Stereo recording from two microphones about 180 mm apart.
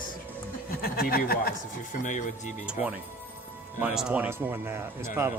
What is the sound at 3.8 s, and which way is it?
Speech, 10° right (ahead or behind).